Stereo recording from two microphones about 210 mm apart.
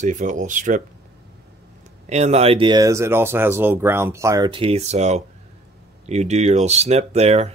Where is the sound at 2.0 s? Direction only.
35° right (ahead or behind); by 4.5 s 15° right (ahead or behind).